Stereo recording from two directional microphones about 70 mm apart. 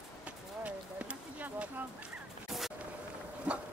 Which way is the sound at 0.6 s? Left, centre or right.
Centre.